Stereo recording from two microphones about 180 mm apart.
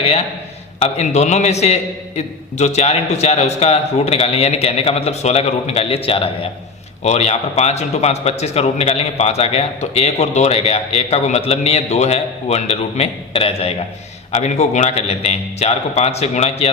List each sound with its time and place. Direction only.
0.0 s a man's voice: 35° left (ahead or behind)